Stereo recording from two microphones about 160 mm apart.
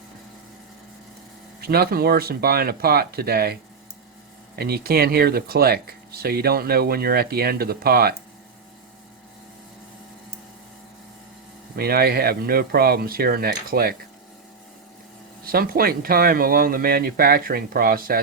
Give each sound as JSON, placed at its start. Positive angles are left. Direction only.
{"t": 1.6, "sound": "speech", "side_deg": -75}
{"t": 11.8, "sound": "speech", "side_deg": -75}
{"t": 15.4, "sound": "speech", "side_deg": -65}